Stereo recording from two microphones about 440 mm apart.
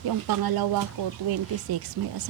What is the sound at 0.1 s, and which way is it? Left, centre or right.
Speech, right.